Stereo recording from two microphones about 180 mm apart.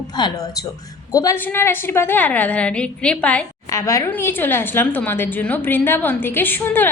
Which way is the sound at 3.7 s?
20° left (ahead or behind).